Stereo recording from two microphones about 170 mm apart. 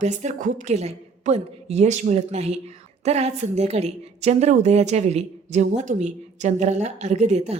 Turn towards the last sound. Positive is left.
turn(degrees=-40)  # may be behind; listen again after turning